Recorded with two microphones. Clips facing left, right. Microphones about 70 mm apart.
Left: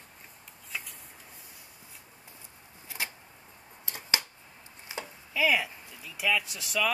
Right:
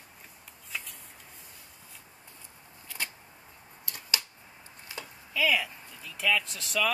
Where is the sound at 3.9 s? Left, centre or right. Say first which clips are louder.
Left 3 dB; left.